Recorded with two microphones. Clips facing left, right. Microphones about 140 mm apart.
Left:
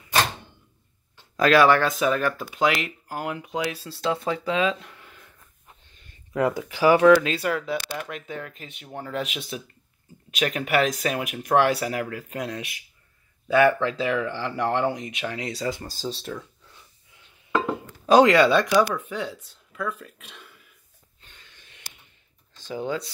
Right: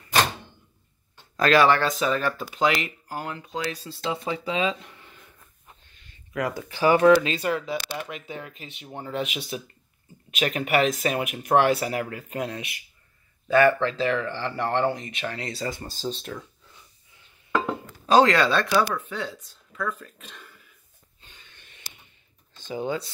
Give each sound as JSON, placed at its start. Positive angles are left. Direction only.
{"t": 1.3, "sound": "speech", "side_deg": 5}
{"t": 6.5, "sound": "speech", "side_deg": 10}
{"t": 8.8, "sound": "speech", "side_deg": -15}
{"t": 9.1, "sound": "speech", "side_deg": 0}
{"t": 13.5, "sound": "speech", "side_deg": 5}
{"t": 18.0, "sound": "speech", "side_deg": 10}
{"t": 22.7, "sound": "speech", "side_deg": -5}